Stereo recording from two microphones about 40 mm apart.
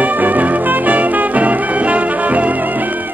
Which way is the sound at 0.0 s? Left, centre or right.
Right.